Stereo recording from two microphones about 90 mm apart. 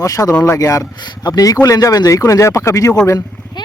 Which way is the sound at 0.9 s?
50° left (ahead or behind).